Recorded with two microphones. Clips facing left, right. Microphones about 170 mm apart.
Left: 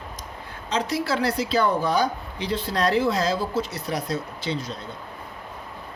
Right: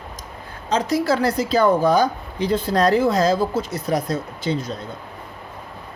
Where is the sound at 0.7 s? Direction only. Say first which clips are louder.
Right 5 dB; 45° right (ahead or behind).